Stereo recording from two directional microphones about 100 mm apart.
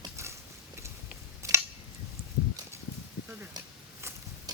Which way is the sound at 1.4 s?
30° right (ahead or behind).